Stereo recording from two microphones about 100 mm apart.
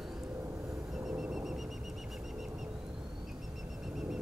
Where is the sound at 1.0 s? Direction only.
5° right (ahead or behind).